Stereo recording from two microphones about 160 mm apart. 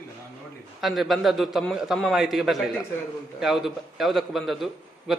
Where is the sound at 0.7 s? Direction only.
Centre (ahead or behind).